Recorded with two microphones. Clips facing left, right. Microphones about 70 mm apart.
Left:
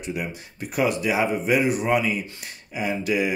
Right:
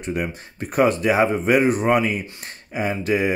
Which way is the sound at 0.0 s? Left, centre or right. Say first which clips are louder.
Right 4 dB; right.